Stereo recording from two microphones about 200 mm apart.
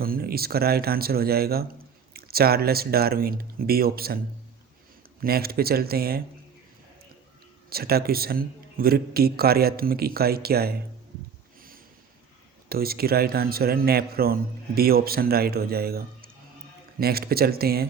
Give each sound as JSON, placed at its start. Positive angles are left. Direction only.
{"t": 0.0, "sound": "a man's voice", "side_deg": -50}
{"t": 5.2, "sound": "a man's voice", "side_deg": -50}
{"t": 7.7, "sound": "a man's voice", "side_deg": -50}
{"t": 12.6, "sound": "a man's voice", "side_deg": -50}